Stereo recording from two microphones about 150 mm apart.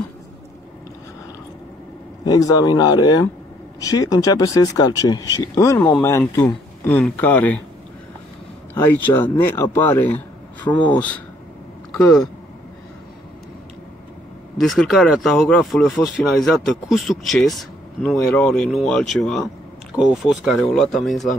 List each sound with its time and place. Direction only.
2.2 s speech: 25° left (ahead or behind); by 7.6 s 10° left (ahead or behind)
8.7 s speech: 15° left (ahead or behind)
14.6 s speech: centre (ahead or behind)